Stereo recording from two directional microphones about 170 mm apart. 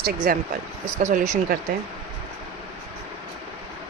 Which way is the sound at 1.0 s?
45° right (ahead or behind).